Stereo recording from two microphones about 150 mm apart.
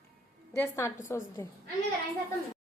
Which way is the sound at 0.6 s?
20° left (ahead or behind).